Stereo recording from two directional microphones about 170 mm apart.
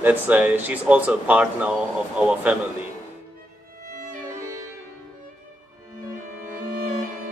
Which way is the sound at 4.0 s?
50° right (ahead or behind).